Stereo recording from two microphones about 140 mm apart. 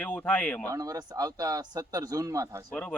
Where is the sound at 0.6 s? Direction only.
25° right (ahead or behind).